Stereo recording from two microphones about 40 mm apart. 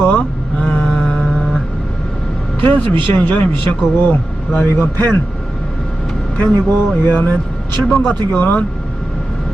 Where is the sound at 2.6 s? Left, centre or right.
Left.